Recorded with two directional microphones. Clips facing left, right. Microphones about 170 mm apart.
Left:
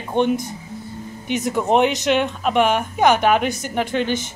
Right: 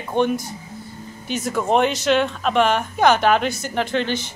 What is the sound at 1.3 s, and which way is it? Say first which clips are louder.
Speech: left 2 dB; 20° left (ahead or behind).